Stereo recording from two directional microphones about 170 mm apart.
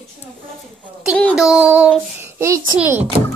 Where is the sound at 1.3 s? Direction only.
5° right (ahead or behind).